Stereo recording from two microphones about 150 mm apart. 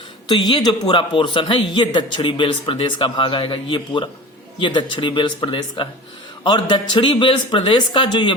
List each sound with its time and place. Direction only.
0.3 s a man's voice: 30° left (ahead or behind)